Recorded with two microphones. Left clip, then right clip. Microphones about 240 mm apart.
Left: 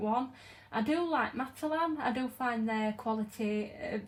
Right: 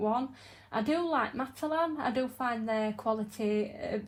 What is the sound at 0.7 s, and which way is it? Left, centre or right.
Speech, centre.